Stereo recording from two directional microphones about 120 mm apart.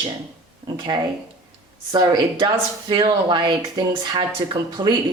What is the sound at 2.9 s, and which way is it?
Speech, 40° right (ahead or behind).